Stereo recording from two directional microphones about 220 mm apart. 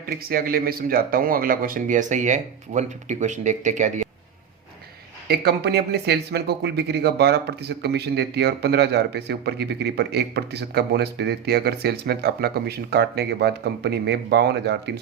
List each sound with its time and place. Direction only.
0.0 s speech: 40° right (ahead or behind)
5.3 s speech: 45° right (ahead or behind)